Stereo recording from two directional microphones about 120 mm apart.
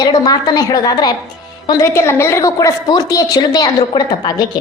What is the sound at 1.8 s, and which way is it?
A woman's voice, 20° left (ahead or behind).